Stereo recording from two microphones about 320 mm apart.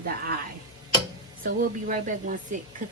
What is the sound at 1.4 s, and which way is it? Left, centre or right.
Speech, right.